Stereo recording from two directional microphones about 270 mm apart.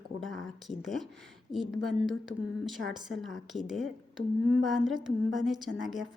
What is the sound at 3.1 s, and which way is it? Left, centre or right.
Speech, centre.